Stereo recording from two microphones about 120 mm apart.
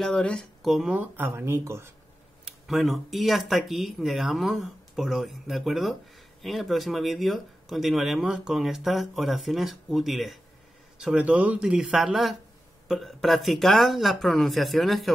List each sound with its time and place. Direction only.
0.0 s speech: 5° left (ahead or behind); by 1.9 s 25° right (ahead or behind)
2.4 s speech: centre (ahead or behind)